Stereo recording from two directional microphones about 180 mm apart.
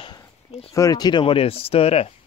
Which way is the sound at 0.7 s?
20° left (ahead or behind).